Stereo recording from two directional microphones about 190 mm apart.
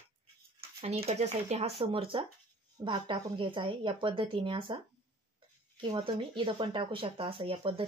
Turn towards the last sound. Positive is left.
turn(degrees=-25)  # may be behind; listen again after turning